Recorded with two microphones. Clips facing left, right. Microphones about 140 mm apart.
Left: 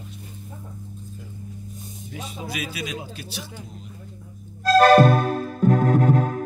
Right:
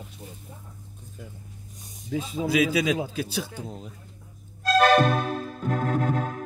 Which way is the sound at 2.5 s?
90° right.